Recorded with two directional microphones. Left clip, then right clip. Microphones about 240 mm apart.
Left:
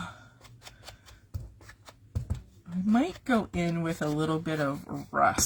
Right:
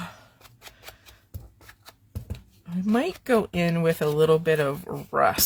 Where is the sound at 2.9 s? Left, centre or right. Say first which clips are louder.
Right 5 dB; right.